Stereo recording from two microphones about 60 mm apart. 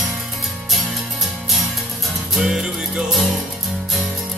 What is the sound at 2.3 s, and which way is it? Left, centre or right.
Music, centre.